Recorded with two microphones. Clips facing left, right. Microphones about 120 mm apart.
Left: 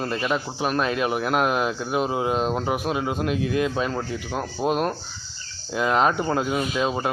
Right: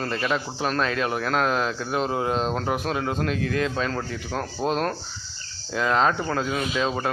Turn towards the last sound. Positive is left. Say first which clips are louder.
# left 1 dB
turn(degrees=15)  # may be behind; listen again after turning